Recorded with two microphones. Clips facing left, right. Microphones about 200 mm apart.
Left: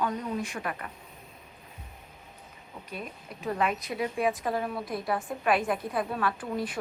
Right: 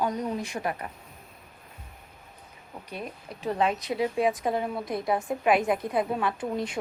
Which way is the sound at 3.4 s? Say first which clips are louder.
Right 3 dB; 30° right (ahead or behind).